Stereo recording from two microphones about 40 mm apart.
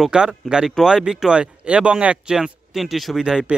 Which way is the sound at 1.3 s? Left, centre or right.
Right.